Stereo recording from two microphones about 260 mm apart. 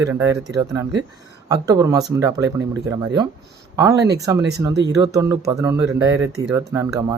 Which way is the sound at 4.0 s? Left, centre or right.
Right.